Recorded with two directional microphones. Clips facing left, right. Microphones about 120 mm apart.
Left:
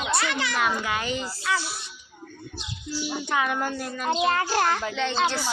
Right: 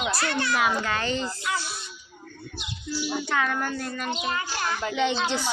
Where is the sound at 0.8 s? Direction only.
10° left (ahead or behind).